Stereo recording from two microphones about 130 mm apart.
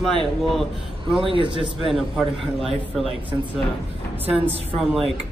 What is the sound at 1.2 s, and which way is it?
Speech, 45° right (ahead or behind).